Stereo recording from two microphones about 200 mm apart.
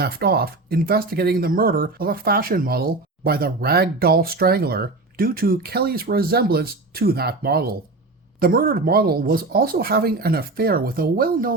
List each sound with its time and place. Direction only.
0.0 s speech: 50° right (ahead or behind)